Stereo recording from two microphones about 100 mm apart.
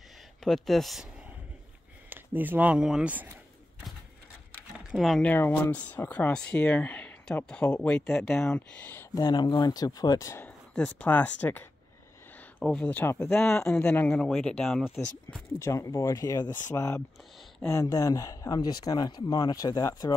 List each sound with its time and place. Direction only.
0.4 s speech: 5° left (ahead or behind)
2.0 s speech: 20° right (ahead or behind)
4.9 s speech: centre (ahead or behind)
5.2 s speech: 20° left (ahead or behind)
9.1 s speech: 45° left (ahead or behind)
10.7 s speech: 10° left (ahead or behind)
12.6 s speech: 10° left (ahead or behind)
15.6 s speech: 30° left (ahead or behind)